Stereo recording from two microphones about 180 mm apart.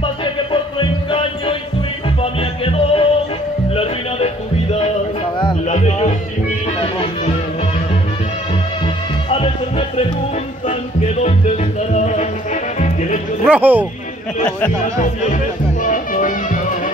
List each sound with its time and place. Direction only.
0.2 s music: 30° left (ahead or behind)
2.6 s music: 30° left (ahead or behind)
5.7 s music: 40° left (ahead or behind)
8.8 s music: 30° left (ahead or behind)
11.2 s music: 40° left (ahead or behind)
13.4 s speech: 10° right (ahead or behind)
15.0 s music: 45° left (ahead or behind)